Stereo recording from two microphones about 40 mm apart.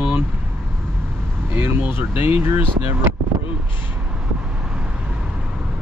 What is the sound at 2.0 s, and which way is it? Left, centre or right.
Speech, right.